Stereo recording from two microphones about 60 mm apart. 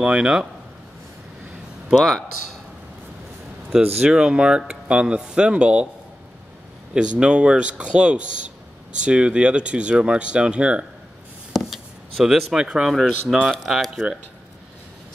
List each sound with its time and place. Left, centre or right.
0.0 s speech: centre
1.9 s a man's voice: centre
3.7 s speech: centre
6.9 s speech: centre
11.5 s chop: centre
13.3 s a man's voice: centre